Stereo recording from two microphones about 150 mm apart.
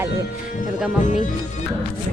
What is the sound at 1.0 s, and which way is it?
Speech, 55° left (ahead or behind).